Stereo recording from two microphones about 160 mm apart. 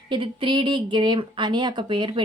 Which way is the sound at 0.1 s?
30° right (ahead or behind).